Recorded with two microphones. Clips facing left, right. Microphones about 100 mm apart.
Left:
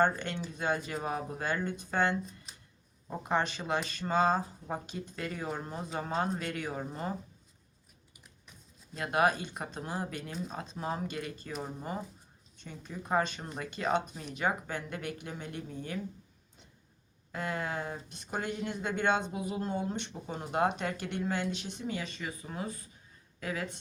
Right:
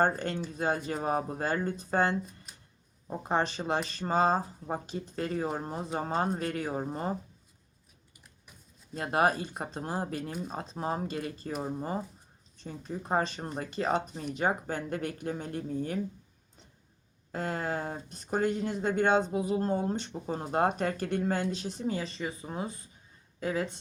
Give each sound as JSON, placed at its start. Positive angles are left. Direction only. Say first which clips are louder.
{"t": 0.0, "sound": "speech", "louder": "right 1 dB", "side_deg": -35}
{"t": 3.2, "sound": "speech", "louder": "right 2 dB", "side_deg": -35}
{"t": 9.0, "sound": "speech", "louder": "right 1 dB", "side_deg": -35}
{"t": 12.5, "sound": "speech", "louder": "right 5 dB", "side_deg": -35}
{"t": 17.3, "sound": "speech", "louder": "right 2 dB", "side_deg": -35}